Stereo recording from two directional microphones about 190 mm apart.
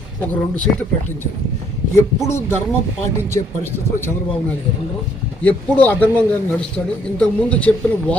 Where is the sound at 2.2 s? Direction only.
15° left (ahead or behind).